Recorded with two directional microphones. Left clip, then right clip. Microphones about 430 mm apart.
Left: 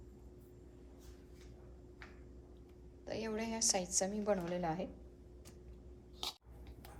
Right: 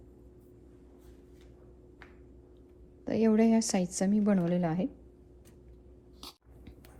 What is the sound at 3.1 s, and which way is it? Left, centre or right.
A woman's voice, centre.